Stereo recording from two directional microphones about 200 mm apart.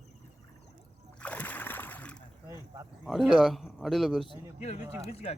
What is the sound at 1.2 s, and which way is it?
Splash, 5° left (ahead or behind).